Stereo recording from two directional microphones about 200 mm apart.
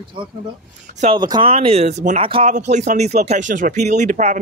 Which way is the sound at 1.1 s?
20° right (ahead or behind).